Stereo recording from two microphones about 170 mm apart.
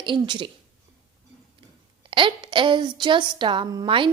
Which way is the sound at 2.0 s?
30° right (ahead or behind).